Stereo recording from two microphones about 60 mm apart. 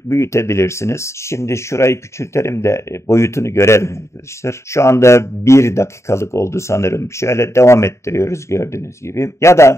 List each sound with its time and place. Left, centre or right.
0.1 s speech: left